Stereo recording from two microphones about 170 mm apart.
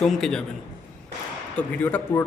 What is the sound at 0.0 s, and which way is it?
Speech, centre (ahead or behind).